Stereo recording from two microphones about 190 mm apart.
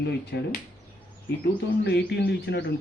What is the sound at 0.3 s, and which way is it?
Speech, 60° left (ahead or behind).